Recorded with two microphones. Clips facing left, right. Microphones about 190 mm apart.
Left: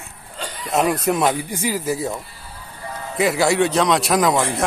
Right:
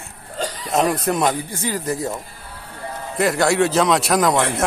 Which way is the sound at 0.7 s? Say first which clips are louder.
Left 1 dB; centre (ahead or behind).